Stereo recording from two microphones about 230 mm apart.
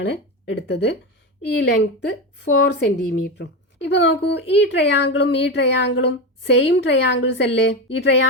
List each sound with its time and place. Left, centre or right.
0.0 s speech: left